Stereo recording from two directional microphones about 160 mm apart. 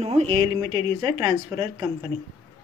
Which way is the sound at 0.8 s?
25° right (ahead or behind).